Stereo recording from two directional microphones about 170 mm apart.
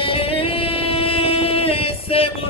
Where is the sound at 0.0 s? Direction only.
35° left (ahead or behind).